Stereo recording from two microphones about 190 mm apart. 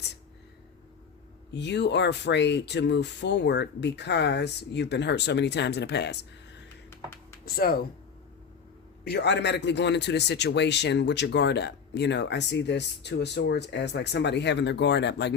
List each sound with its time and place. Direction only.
1.5 s speech: 65° left (ahead or behind)
7.4 s speech: 50° left (ahead or behind)
9.0 s speech: 65° left (ahead or behind)